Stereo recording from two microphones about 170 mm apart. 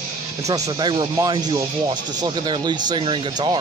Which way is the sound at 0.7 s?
25° right (ahead or behind).